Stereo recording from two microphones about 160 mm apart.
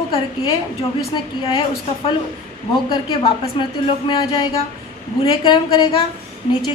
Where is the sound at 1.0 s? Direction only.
35° left (ahead or behind).